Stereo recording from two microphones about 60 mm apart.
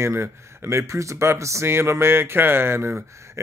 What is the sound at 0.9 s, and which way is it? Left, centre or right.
Speech, right.